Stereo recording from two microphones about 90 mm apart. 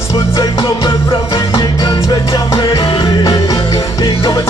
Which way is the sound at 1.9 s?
50° left (ahead or behind).